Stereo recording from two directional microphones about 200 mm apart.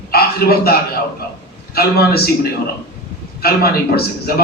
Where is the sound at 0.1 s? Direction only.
50° left (ahead or behind).